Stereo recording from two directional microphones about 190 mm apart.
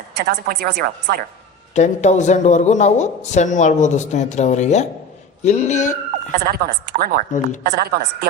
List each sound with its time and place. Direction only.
0.2 s a woman's voice: 55° right (ahead or behind)
1.7 s speech: 40° left (ahead or behind)
6.4 s a woman's voice: 50° right (ahead or behind)